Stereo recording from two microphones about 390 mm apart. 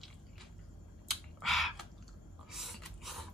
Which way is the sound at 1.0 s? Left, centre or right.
Centre.